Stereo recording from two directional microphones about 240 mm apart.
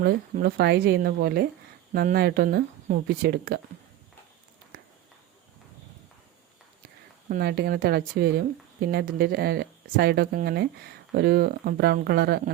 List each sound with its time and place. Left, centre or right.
0.0 s speech: right
7.3 s speech: right